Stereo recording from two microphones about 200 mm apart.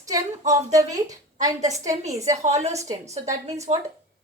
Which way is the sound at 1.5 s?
35° right (ahead or behind).